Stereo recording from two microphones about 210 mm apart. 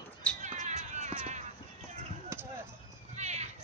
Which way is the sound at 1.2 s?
35° right (ahead or behind).